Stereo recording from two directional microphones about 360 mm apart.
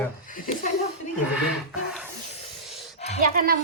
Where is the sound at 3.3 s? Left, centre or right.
Right.